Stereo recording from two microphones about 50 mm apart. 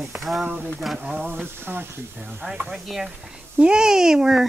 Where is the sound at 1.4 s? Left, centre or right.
Right.